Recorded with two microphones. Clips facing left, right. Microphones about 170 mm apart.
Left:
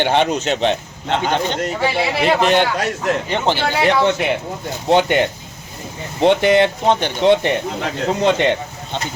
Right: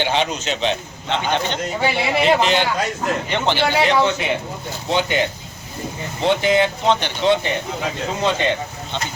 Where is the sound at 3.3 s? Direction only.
40° left (ahead or behind).